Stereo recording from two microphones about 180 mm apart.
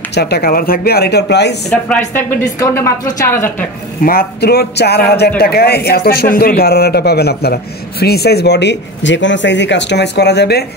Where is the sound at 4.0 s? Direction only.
55° left (ahead or behind).